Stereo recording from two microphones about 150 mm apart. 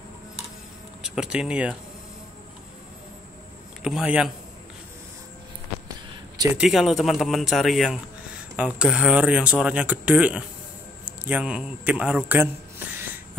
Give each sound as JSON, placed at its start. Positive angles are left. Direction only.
{"t": 1.0, "sound": "speech", "side_deg": -5}
{"t": 3.8, "sound": "speech", "side_deg": -5}
{"t": 5.9, "sound": "a sound", "side_deg": -25}
{"t": 6.5, "sound": "a man's voice", "side_deg": -5}